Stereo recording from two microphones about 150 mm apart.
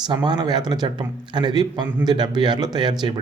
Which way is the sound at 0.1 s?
30° right (ahead or behind).